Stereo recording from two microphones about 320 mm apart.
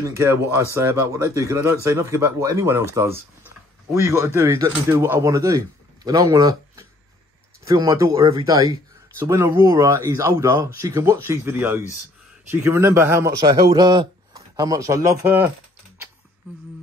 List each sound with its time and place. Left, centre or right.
0.0 s a man's voice: centre